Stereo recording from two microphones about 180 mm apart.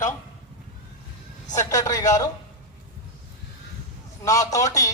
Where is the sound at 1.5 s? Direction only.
20° left (ahead or behind).